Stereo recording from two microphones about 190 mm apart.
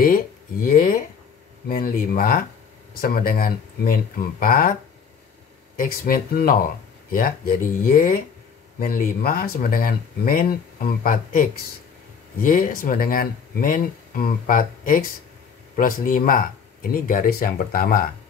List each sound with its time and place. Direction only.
0.0 s speech: 50° left (ahead or behind)
5.8 s speech: 50° left (ahead or behind)